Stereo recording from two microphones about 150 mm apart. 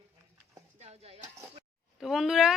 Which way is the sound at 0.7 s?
45° right (ahead or behind).